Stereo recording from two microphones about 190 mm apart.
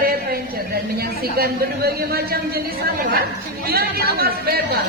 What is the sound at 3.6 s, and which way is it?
Speech, 55° right (ahead or behind).